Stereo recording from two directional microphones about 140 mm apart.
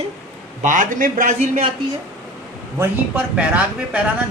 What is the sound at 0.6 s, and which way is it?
Speech, 70° right (ahead or behind).